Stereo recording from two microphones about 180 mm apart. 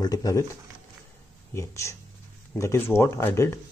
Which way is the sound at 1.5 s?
15° left (ahead or behind).